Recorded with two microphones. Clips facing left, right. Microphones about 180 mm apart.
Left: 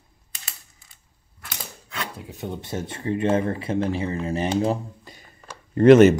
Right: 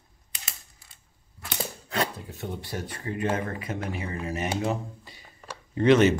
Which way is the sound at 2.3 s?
20° left (ahead or behind).